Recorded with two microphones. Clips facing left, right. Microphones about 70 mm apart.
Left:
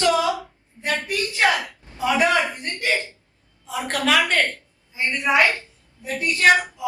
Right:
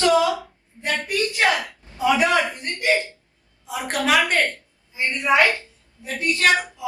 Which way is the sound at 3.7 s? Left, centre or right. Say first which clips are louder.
Even; centre.